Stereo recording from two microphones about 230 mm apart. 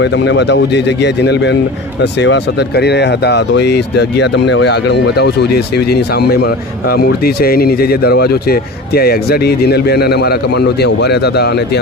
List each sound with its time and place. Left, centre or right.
0.0 s speech: left